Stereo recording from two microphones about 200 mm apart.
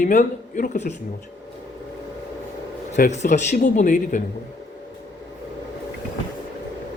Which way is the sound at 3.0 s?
35° left (ahead or behind).